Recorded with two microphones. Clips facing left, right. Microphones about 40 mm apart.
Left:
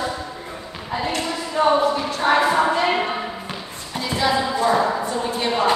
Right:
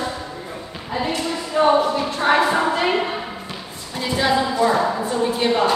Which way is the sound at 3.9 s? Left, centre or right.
Centre.